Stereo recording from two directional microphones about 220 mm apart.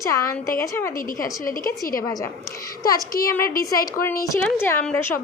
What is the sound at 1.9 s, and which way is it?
A woman's voice, 15° left (ahead or behind).